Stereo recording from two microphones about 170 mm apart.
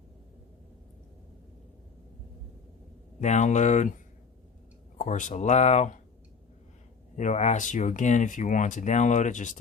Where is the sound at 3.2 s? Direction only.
45° left (ahead or behind).